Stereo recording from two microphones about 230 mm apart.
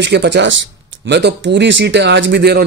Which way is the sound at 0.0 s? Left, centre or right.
Right.